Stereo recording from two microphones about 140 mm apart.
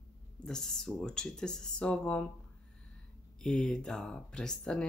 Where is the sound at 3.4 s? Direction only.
5° left (ahead or behind).